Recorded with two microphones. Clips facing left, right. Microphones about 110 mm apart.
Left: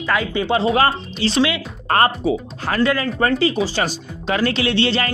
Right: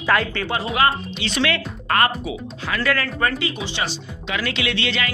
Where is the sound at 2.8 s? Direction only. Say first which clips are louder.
Left 4 dB; 25° left (ahead or behind).